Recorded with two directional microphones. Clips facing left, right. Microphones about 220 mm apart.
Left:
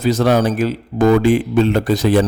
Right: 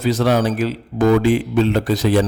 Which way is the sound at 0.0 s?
45° left (ahead or behind).